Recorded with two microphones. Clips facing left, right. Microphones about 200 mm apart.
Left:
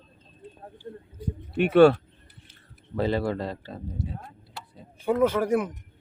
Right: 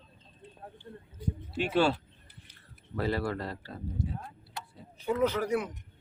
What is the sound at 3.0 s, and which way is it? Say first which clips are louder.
Speech: left 5 dB; 20° left (ahead or behind).